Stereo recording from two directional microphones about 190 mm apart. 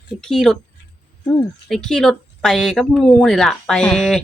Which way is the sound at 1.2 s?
15° left (ahead or behind).